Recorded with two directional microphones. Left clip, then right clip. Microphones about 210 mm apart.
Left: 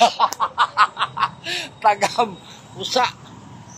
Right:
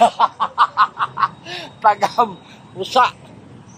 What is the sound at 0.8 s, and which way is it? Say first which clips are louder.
Snicker: right 1 dB; 15° left (ahead or behind).